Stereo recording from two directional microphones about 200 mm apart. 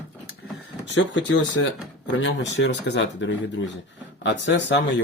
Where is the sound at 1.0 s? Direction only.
70° left (ahead or behind).